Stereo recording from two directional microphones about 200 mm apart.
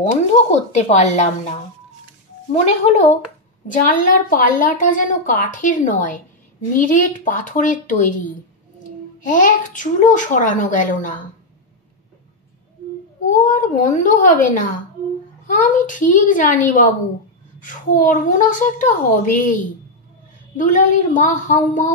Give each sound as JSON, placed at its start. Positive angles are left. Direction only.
{"t": 0.0, "sound": "a woman's voice", "side_deg": 35}
{"t": 2.5, "sound": "a woman's voice", "side_deg": 35}
{"t": 9.2, "sound": "a child's voice", "side_deg": 40}
{"t": 13.3, "sound": "a woman's voice", "side_deg": 40}
{"t": 15.6, "sound": "a woman's voice", "side_deg": 40}
{"t": 20.5, "sound": "a woman's voice", "side_deg": 40}